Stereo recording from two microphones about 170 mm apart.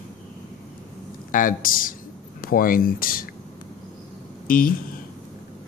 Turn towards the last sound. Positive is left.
turn(degrees=55)  # may be behind; listen again after turning